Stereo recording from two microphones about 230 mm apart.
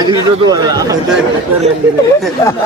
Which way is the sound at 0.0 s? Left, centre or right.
Centre.